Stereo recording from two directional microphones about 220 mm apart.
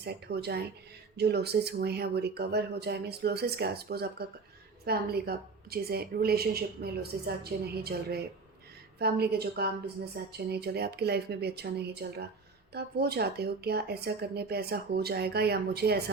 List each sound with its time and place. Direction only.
0.0 s a woman's voice: 45° right (ahead or behind)